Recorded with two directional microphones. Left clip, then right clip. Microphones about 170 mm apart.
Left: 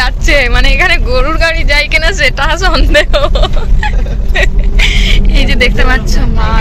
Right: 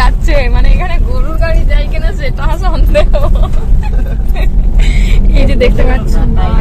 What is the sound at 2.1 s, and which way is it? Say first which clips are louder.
Speech: left 10 dB; 5° left (ahead or behind).